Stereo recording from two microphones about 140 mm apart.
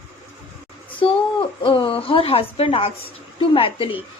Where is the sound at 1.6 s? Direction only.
35° left (ahead or behind).